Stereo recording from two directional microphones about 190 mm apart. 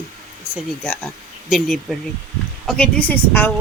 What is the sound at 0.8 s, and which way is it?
A woman's voice, 5° left (ahead or behind).